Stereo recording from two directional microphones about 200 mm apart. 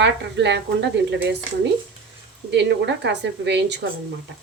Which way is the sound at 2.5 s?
60° right (ahead or behind).